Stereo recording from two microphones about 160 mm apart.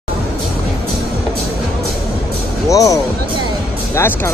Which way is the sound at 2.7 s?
20° left (ahead or behind).